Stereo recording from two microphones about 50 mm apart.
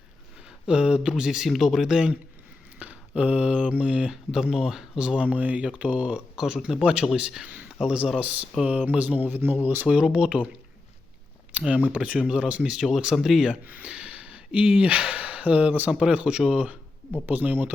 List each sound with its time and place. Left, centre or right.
0.7 s speech: centre
1.5 s speech: centre; by 6.4 s right
6.4 s speech: centre
7.4 s speech: right
7.9 s speech: centre
8.2 s speech: right
9.8 s speech: centre
11.5 s speech: right
12.6 s speech: centre
13.7 s speech: right
13.9 s a sound: right
15.9 s speech: centre
17.2 s speech: right